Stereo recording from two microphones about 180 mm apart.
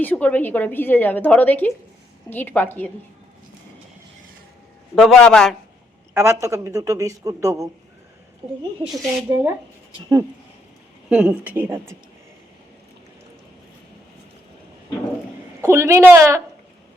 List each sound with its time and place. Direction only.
0.0 s a woman's voice: 10° left (ahead or behind)
4.9 s speech: 5° left (ahead or behind)
6.1 s speech: 15° right (ahead or behind)
8.8 s speech: centre (ahead or behind)
11.1 s speech: 5° right (ahead or behind)
15.6 s speech: 15° right (ahead or behind)